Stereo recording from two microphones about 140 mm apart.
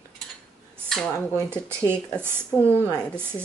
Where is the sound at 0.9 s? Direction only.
5° left (ahead or behind).